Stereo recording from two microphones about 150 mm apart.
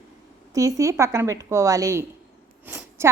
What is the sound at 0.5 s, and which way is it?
A woman's voice, 20° right (ahead or behind).